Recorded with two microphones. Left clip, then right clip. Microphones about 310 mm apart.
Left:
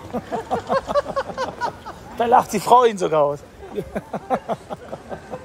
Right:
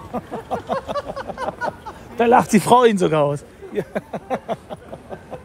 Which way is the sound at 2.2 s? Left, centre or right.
Right.